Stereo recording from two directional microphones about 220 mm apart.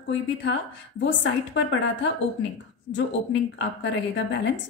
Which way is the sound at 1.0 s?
55° left (ahead or behind).